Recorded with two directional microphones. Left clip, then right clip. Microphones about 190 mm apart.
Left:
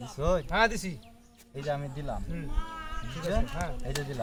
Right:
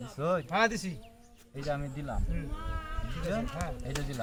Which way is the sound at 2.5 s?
40° left (ahead or behind).